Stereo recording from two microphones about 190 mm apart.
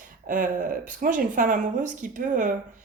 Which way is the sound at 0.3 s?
45° right (ahead or behind).